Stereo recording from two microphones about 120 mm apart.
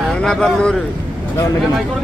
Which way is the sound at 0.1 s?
5° left (ahead or behind).